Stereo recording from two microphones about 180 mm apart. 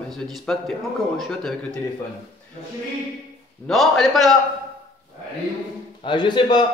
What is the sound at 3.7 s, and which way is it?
Speech, centre (ahead or behind).